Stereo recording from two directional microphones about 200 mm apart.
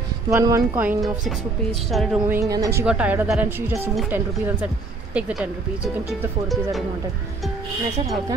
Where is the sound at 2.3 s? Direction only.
15° right (ahead or behind).